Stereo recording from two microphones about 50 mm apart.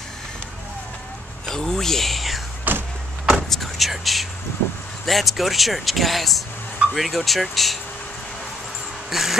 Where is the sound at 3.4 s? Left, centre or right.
Centre.